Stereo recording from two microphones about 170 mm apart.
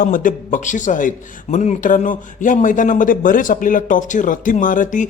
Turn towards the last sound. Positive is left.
turn(degrees=50)  # may be behind; listen again after turning